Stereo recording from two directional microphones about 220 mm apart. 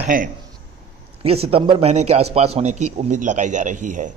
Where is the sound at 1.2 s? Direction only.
25° right (ahead or behind).